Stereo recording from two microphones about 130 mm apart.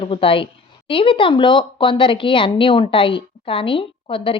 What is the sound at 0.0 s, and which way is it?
A woman's voice, 45° left (ahead or behind).